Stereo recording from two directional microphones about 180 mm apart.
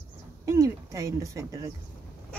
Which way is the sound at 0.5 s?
15° right (ahead or behind).